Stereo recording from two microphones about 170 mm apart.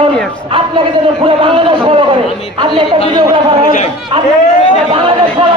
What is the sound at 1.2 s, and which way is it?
A man's voice, 30° right (ahead or behind).